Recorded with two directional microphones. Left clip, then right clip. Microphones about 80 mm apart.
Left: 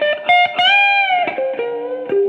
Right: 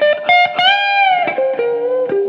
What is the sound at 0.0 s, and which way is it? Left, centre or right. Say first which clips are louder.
Music: right 2 dB; right.